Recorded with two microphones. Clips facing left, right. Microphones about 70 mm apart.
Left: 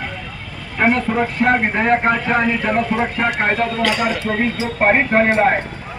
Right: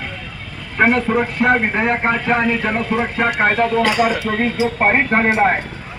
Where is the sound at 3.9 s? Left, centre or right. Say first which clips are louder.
Right 2 dB; centre.